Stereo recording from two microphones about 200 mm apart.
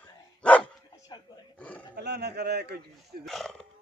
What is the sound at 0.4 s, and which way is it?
Dog, 5° left (ahead or behind).